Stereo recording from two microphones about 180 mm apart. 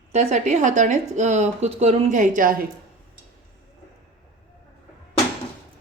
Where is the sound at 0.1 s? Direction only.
40° right (ahead or behind).